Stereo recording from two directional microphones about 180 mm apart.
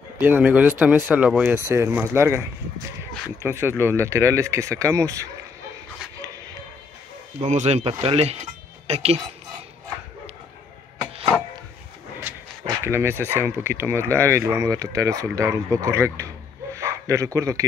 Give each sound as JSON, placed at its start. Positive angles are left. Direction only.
{"t": 0.2, "sound": "speech", "side_deg": -10}
{"t": 3.4, "sound": "speech", "side_deg": -15}
{"t": 7.3, "sound": "speech", "side_deg": -40}
{"t": 12.8, "sound": "speech", "side_deg": -15}
{"t": 16.7, "sound": "a sound", "side_deg": -15}